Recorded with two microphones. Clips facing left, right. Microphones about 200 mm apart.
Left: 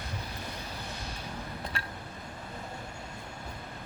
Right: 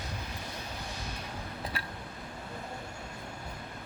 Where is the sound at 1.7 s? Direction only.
5° right (ahead or behind).